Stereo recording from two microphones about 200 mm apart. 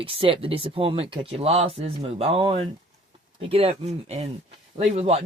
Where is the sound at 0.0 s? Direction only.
25° right (ahead or behind).